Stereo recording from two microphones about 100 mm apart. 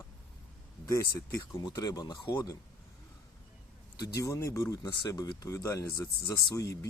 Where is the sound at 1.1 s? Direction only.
45° left (ahead or behind).